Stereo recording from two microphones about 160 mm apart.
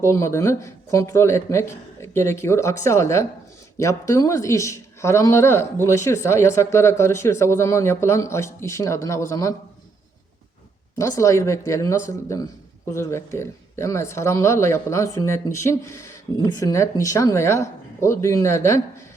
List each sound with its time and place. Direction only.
0.0 s speech: 15° left (ahead or behind)
10.9 s speech: 20° left (ahead or behind)